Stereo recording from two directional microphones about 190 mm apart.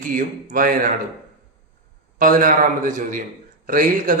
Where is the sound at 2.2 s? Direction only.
45° right (ahead or behind).